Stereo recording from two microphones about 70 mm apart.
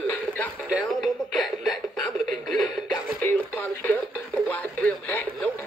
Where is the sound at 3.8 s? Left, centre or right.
Left.